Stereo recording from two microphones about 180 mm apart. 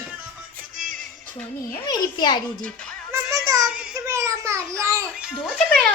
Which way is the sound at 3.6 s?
5° right (ahead or behind).